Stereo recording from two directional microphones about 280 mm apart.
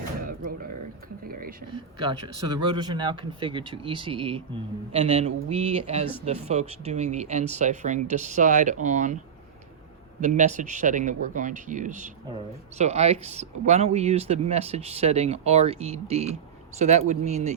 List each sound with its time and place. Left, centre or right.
2.0 s speech: centre
10.2 s speech: right